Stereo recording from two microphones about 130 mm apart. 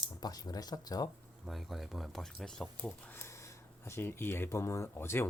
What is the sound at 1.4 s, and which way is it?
Speech, centre (ahead or behind).